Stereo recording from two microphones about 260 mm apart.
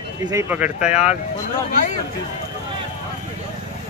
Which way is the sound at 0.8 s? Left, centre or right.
Left.